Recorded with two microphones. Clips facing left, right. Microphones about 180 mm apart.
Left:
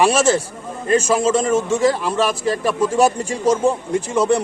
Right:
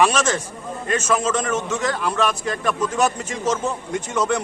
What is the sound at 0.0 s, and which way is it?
A man's voice, 30° left (ahead or behind).